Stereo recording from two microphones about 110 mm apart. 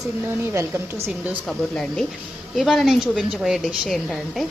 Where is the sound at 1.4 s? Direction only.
5° left (ahead or behind).